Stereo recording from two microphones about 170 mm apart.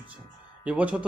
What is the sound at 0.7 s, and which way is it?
Speech, 5° right (ahead or behind).